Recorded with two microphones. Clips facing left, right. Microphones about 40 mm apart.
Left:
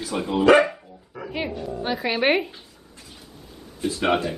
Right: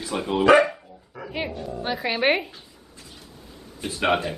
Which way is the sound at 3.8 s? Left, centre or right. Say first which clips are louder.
Left 5 dB; right.